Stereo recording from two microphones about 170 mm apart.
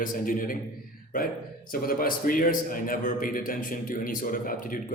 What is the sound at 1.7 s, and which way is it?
A man's voice, 55° left (ahead or behind).